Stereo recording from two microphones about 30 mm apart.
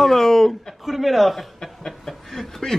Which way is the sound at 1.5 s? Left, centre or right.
Centre.